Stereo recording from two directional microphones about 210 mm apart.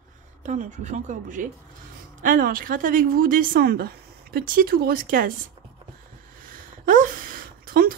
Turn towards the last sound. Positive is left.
turn(degrees=-45)  # may be behind; listen again after turning